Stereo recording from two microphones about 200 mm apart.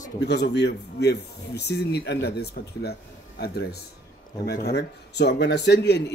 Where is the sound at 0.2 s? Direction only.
55° left (ahead or behind).